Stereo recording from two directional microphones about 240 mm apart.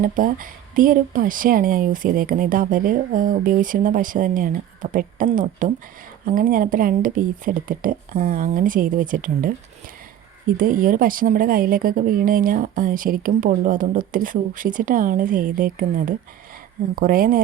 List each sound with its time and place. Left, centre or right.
0.0 s speech: right
10.6 s speech: right